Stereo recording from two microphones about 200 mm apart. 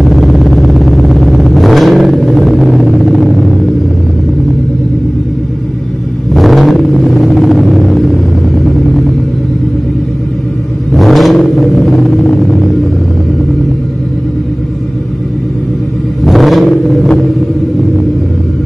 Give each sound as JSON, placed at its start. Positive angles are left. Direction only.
{"t": 0.0, "sound": "vehicle", "side_deg": 0}
{"t": 6.3, "sound": "vehicle", "side_deg": 0}
{"t": 10.9, "sound": "vehicle", "side_deg": 0}
{"t": 16.3, "sound": "vehicle", "side_deg": 0}